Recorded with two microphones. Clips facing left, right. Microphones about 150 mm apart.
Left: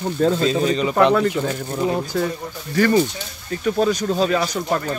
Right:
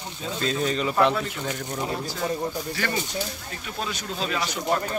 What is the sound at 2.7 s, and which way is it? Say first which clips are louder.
Speech: left 11 dB; 45° left (ahead or behind).